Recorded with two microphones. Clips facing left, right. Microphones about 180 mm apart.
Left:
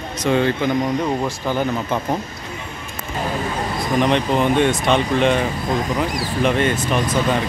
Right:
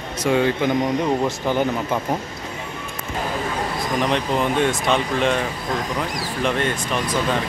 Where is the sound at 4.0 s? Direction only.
Centre (ahead or behind).